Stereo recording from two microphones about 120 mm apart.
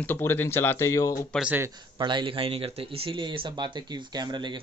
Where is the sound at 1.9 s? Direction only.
40° right (ahead or behind).